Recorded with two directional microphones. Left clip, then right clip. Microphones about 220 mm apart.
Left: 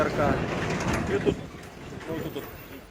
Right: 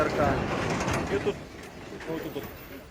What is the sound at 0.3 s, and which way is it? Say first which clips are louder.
Vehicle: even; 35° right (ahead or behind).